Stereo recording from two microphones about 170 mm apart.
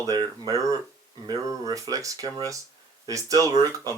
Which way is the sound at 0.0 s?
20° right (ahead or behind).